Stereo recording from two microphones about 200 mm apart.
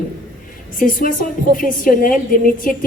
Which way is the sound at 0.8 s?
45° left (ahead or behind).